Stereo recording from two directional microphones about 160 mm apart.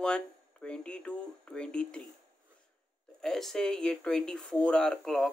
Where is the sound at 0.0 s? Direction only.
5° left (ahead or behind).